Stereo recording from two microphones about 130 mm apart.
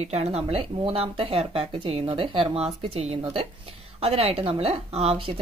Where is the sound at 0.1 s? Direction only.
55° right (ahead or behind).